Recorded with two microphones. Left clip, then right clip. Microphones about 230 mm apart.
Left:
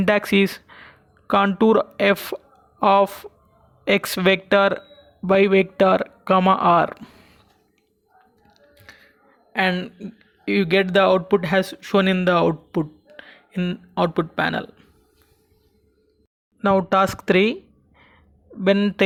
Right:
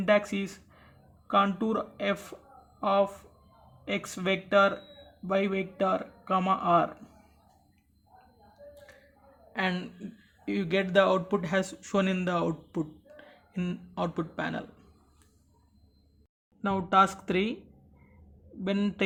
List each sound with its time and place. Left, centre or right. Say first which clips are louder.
0.0 s speech: left 8 dB; left
8.9 s a sound: left 9 dB; left
9.5 s speech: left 10 dB; left
16.6 s speech: left 6 dB; left
18.6 s speech: left 13 dB; left